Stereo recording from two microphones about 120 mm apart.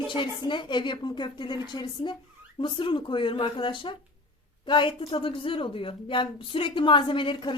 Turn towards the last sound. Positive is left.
turn(degrees=45)  # may be behind; listen again after turning